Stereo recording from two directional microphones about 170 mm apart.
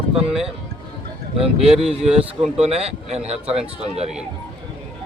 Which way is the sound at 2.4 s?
35° right (ahead or behind).